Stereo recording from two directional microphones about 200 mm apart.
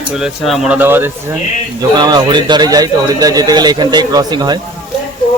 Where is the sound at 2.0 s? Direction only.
20° right (ahead or behind).